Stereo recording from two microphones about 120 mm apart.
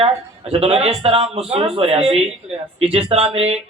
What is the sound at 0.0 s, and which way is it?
Speech, 55° right (ahead or behind).